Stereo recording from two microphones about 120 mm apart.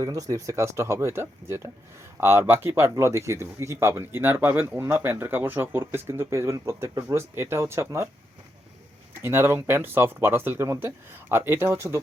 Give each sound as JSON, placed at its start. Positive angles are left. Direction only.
{"t": 0.0, "sound": "speech", "side_deg": -30}
{"t": 9.1, "sound": "speech", "side_deg": -20}